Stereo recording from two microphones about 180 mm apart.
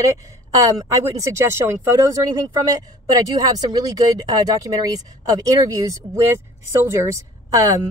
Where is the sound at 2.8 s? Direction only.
20° right (ahead or behind).